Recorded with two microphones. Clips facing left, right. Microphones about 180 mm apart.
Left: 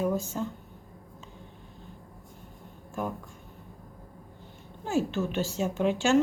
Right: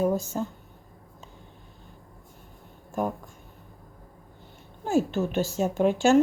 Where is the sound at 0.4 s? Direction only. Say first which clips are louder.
Right 2 dB; 40° right (ahead or behind).